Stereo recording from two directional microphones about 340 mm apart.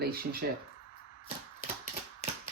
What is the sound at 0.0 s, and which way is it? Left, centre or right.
Speech, right.